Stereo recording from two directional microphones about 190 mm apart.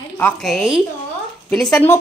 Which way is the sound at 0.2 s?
Centre (ahead or behind).